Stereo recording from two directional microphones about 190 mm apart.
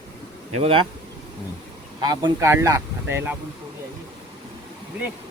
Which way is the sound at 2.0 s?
20° right (ahead or behind).